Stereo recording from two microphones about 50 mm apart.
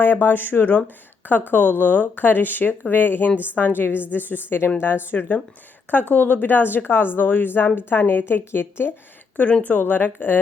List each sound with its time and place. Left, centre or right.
0.0 s speech: left
5.1 s speech: left
5.9 s speech: left
9.6 s speech: left